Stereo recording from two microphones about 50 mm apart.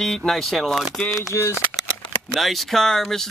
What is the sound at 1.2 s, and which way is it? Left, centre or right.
Speech, left.